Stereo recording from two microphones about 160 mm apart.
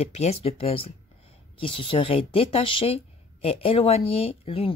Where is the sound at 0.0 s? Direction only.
40° left (ahead or behind).